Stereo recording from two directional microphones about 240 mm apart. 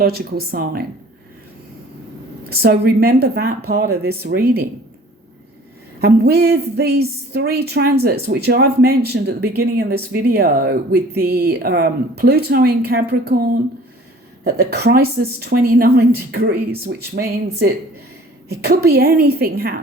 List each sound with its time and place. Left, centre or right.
0.0 s a woman's voice: right
2.5 s a woman's voice: right
6.0 s a woman's voice: right